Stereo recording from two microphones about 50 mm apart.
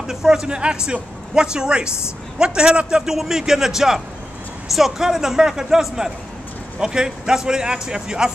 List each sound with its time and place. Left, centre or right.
0.0 s a man's voice: centre